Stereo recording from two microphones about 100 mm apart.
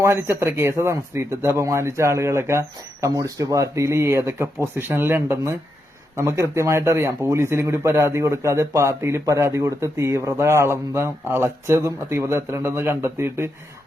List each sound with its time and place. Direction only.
0.0 s a man's voice: 25° right (ahead or behind)